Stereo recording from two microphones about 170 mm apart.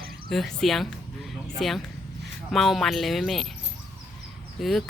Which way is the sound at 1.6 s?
Centre (ahead or behind).